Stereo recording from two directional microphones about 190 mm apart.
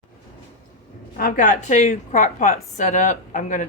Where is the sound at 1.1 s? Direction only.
45° left (ahead or behind).